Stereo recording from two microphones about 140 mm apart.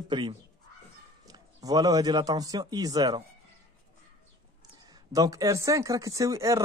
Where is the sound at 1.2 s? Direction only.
25° right (ahead or behind).